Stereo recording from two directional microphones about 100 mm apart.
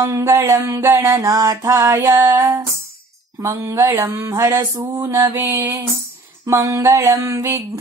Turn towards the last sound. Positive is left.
turn(degrees=-30)  # may be behind; listen again after turning